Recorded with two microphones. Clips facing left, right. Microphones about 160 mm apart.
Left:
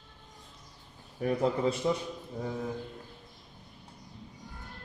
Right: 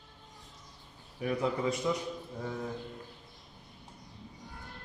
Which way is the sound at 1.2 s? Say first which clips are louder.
Left 3 dB; 35° left (ahead or behind).